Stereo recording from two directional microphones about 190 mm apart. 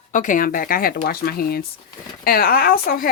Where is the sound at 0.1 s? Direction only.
45° left (ahead or behind).